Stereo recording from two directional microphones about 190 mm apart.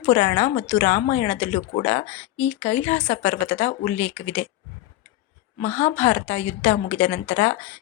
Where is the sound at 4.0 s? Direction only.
10° left (ahead or behind).